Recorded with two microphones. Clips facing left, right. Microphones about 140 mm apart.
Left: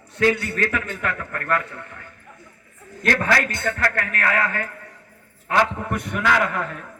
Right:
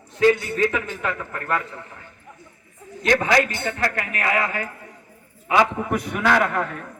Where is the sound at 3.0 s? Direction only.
20° right (ahead or behind).